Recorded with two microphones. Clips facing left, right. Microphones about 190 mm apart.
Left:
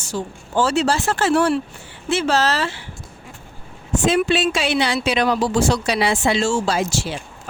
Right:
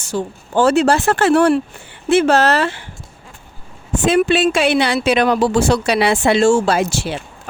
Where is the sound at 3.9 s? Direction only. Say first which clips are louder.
Right 3 dB; 55° right (ahead or behind).